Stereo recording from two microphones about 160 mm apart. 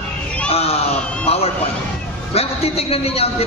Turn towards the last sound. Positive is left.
turn(degrees=40)  # may be behind; listen again after turning